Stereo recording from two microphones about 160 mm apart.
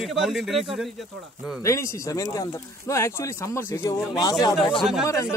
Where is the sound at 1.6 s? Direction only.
20° left (ahead or behind).